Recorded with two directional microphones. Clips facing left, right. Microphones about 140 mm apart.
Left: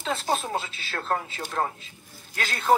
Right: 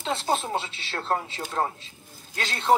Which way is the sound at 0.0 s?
30° right (ahead or behind).